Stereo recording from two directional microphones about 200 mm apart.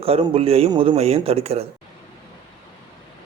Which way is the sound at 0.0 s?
30° right (ahead or behind).